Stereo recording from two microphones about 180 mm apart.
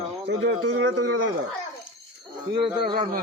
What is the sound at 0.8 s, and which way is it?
Speech, 90° right.